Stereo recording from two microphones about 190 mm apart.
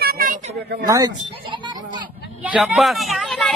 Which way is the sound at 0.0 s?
50° right (ahead or behind).